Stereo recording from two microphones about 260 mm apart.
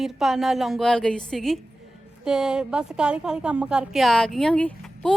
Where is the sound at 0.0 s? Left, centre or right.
Centre.